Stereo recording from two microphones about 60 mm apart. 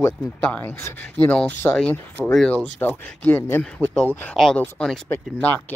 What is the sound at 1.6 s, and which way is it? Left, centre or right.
Speech, left.